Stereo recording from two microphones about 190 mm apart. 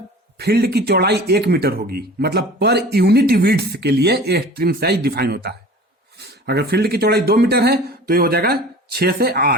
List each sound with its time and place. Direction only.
0.3 s speech: 55° right (ahead or behind)